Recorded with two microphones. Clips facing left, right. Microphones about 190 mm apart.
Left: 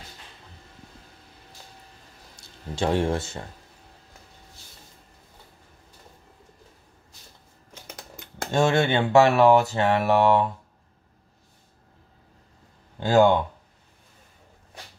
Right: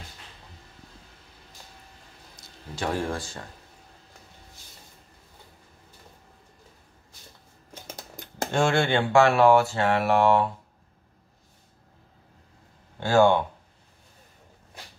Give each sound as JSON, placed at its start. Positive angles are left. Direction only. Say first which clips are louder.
{"t": 2.7, "sound": "speech", "louder": "left 5 dB", "side_deg": 25}
{"t": 7.8, "sound": "typing", "louder": "right 1 dB", "side_deg": -30}
{"t": 8.6, "sound": "speech", "louder": "left 1 dB", "side_deg": 20}
{"t": 13.0, "sound": "speech", "louder": "left 1 dB", "side_deg": 15}